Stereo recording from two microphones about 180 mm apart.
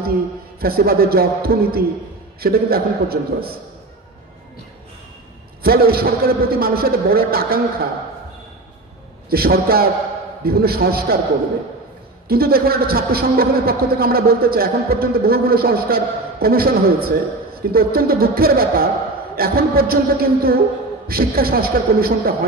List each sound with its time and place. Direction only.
0.6 s a man's voice: 55° right (ahead or behind)
5.6 s a man's voice: 60° right (ahead or behind)
9.3 s a man's voice: 55° right (ahead or behind)
12.3 s a man's voice: 60° right (ahead or behind)